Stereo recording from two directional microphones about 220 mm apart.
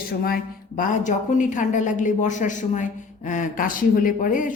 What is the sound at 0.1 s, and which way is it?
A woman's voice, 45° left (ahead or behind).